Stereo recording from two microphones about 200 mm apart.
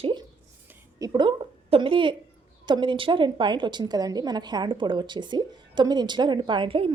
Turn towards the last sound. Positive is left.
turn(degrees=-25)  # may be behind; listen again after turning